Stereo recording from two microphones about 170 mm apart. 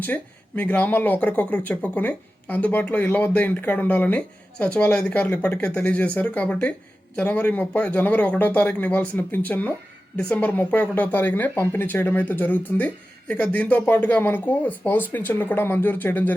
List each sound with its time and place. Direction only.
0.0 s speech: 10° left (ahead or behind)